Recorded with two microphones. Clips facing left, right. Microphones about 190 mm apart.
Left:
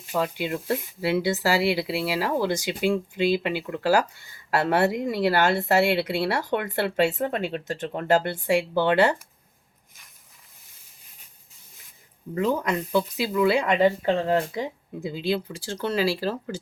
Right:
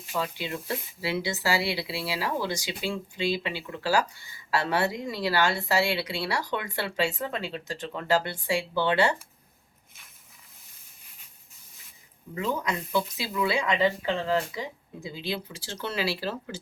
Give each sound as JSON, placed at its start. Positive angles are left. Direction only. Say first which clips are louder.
{"t": 0.1, "sound": "a woman's voice", "louder": "left 5 dB", "side_deg": 50}
{"t": 12.3, "sound": "speech", "louder": "left 5 dB", "side_deg": 45}